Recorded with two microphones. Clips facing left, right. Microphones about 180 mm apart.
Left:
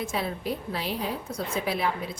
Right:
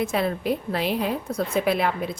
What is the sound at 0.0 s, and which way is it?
A woman's voice, 60° right (ahead or behind).